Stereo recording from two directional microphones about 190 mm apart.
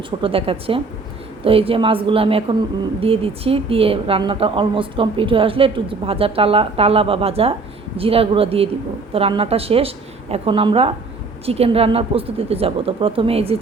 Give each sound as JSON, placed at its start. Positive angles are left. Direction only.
{"t": 0.2, "sound": "a man's voice", "side_deg": -30}